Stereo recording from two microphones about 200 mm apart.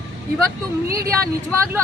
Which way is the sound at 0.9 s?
15° right (ahead or behind).